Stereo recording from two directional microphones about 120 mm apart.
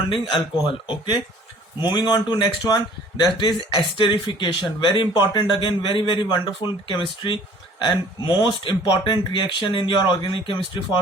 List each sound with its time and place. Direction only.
0.1 s speech: 45° left (ahead or behind)